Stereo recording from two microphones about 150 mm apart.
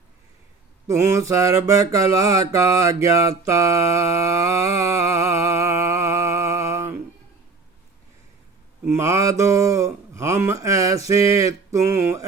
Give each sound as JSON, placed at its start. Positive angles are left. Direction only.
{"t": 0.9, "sound": "mantra", "side_deg": -20}
{"t": 8.8, "sound": "mantra", "side_deg": -20}